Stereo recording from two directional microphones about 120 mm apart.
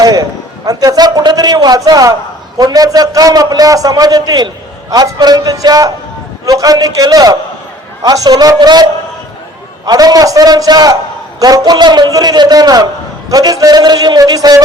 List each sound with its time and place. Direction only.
0.0 s a man's voice: 30° right (ahead or behind)